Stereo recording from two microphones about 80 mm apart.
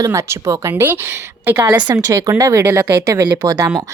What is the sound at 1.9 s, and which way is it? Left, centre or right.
A woman's voice, right.